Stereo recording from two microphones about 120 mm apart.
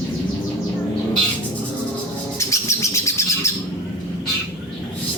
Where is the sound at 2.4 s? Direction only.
25° left (ahead or behind).